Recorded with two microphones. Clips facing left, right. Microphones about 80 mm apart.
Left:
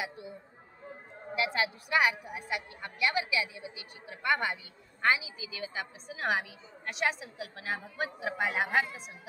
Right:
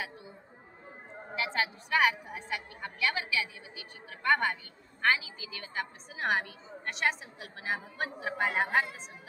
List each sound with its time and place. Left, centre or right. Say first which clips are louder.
1.5 s a woman's voice: right 2 dB; centre